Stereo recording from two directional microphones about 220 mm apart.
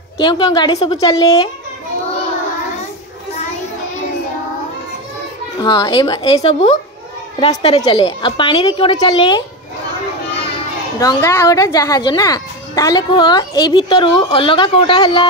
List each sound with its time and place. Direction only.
0.2 s speech: 20° left (ahead or behind)
5.6 s speech: 20° left (ahead or behind)
11.0 s speech: 15° left (ahead or behind)